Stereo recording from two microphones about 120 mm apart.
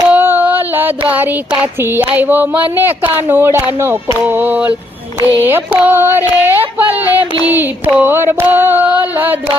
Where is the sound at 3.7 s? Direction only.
20° right (ahead or behind).